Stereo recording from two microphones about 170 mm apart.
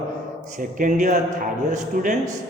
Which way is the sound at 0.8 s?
50° right (ahead or behind).